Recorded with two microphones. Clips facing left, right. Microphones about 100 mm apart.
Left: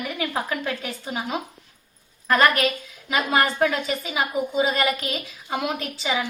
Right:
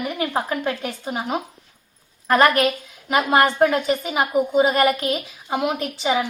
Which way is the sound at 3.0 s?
50° right (ahead or behind).